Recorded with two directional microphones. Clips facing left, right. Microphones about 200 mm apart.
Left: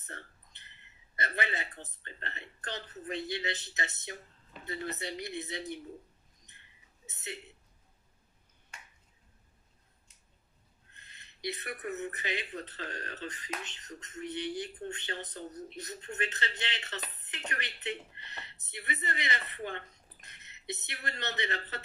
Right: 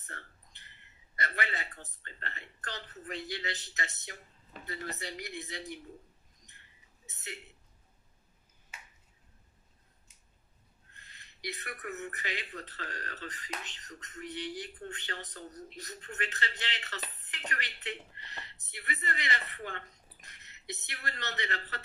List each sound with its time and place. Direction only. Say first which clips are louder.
0.0 s a sound: left 2 dB; 20° left (ahead or behind)
1.1 s speech: left 1 dB; 20° left (ahead or behind)
7.1 s speech: left 3 dB; 20° left (ahead or behind)
8.7 s finger snapping: even; 5° right (ahead or behind)
10.9 s speech: right 1 dB; 20° left (ahead or behind)